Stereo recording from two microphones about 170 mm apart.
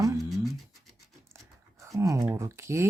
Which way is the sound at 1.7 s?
20° right (ahead or behind).